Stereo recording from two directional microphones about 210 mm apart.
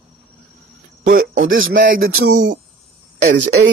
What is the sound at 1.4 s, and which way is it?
Speech, 65° right (ahead or behind).